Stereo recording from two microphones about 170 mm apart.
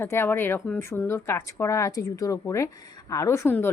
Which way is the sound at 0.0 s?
15° left (ahead or behind).